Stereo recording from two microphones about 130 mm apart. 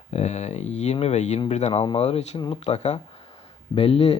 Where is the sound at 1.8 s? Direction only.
45° left (ahead or behind).